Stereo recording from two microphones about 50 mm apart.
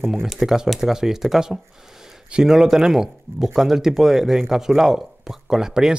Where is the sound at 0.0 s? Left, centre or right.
Centre.